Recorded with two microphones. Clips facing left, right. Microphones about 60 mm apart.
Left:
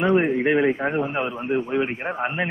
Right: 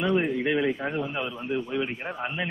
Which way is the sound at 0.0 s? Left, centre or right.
Left.